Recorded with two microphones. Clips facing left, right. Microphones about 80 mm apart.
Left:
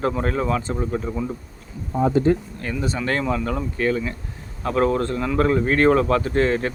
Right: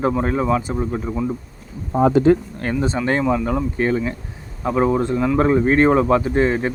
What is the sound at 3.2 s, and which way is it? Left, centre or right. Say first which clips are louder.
Speech: right 4 dB; centre.